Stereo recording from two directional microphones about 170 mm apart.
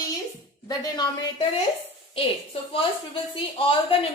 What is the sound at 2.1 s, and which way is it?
Speech, 30° left (ahead or behind).